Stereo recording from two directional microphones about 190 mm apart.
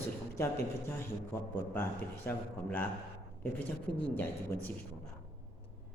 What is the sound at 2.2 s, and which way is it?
Speech, 10° left (ahead or behind).